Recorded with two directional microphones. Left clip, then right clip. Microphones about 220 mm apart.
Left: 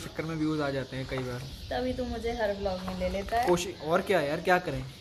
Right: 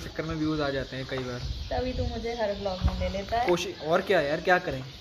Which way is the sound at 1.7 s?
25° left (ahead or behind).